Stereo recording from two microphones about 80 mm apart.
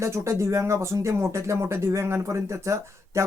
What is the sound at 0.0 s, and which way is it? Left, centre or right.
Speech, right.